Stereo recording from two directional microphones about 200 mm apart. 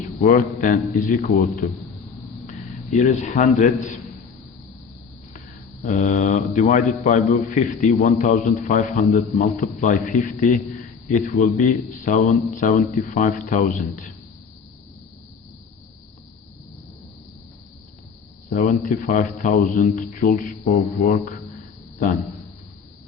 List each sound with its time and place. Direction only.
0.0 s a man's voice: 45° left (ahead or behind)
3.0 s a man's voice: 35° left (ahead or behind)
5.8 s a man's voice: 40° left (ahead or behind)
18.5 s a man's voice: 40° left (ahead or behind)